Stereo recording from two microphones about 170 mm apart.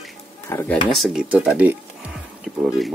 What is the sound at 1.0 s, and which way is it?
Speech, 5° right (ahead or behind).